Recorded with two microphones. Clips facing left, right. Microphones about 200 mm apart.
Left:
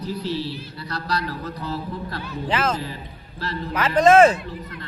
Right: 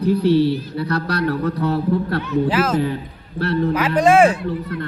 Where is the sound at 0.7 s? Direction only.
60° right (ahead or behind).